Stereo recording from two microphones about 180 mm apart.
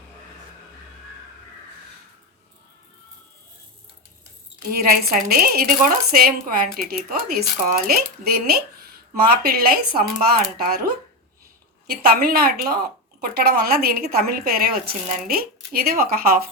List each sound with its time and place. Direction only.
4.7 s speech: 60° right (ahead or behind)
12.0 s speech: 55° right (ahead or behind)